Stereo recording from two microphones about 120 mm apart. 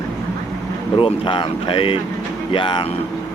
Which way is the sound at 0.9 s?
45° left (ahead or behind).